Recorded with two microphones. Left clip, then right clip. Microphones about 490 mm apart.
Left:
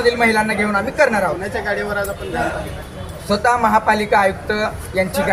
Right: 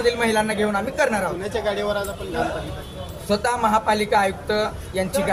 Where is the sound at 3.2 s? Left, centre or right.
Right.